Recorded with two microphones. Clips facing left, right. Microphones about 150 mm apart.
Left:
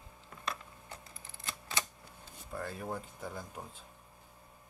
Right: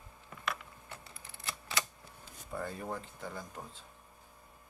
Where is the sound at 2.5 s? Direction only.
Centre (ahead or behind).